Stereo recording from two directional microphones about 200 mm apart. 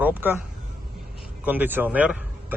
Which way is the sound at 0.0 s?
10° right (ahead or behind).